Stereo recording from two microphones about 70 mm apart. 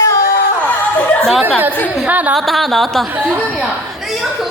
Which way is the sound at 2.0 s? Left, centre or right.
Right.